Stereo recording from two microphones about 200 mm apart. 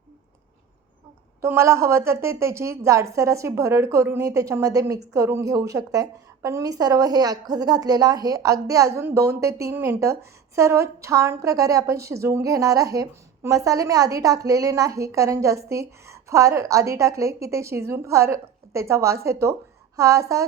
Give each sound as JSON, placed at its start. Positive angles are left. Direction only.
{"t": 1.4, "sound": "a woman's voice", "side_deg": -15}